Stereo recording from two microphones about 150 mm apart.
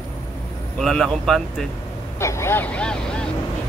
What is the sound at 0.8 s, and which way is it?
Speech, 5° left (ahead or behind).